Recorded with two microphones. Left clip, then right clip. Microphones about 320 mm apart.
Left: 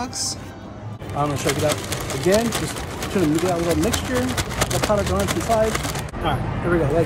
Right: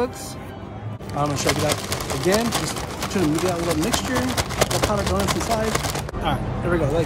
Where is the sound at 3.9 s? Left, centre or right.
Centre.